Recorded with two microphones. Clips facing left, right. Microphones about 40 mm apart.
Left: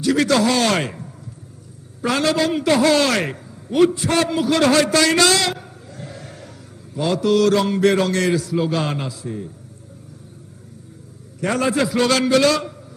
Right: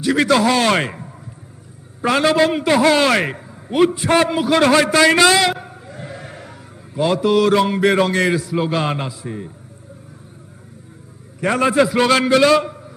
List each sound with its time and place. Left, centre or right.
0.0 s a man's voice: centre
11.3 s a man's voice: centre